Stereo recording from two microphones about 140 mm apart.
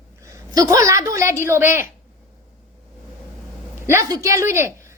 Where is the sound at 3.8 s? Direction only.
20° right (ahead or behind).